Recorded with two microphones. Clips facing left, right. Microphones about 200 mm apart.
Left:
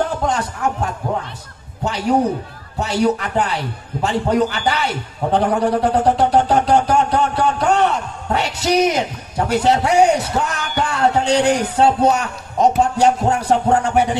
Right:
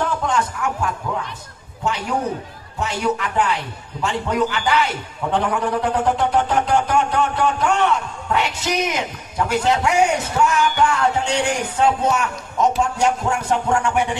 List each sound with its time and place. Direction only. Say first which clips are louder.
0.2 s speech: left 2 dB; 35° left (ahead or behind)
2.8 s speech: left 4 dB; 35° left (ahead or behind)